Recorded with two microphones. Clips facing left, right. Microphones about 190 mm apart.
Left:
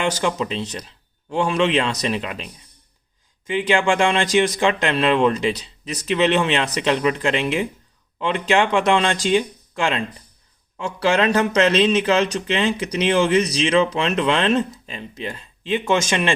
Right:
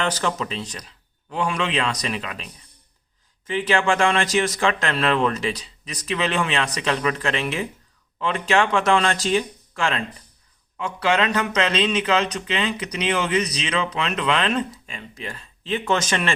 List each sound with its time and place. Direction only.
0.2 s speech: 15° left (ahead or behind)
3.4 s speech: 15° left (ahead or behind)
10.8 s speech: 30° left (ahead or behind)